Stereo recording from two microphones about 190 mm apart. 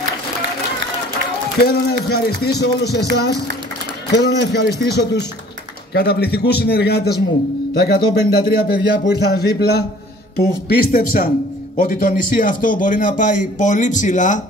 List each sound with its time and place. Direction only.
1.6 s a man's voice: 55° left (ahead or behind)
4.1 s a man's voice: 60° left (ahead or behind); by 14.4 s 40° left (ahead or behind)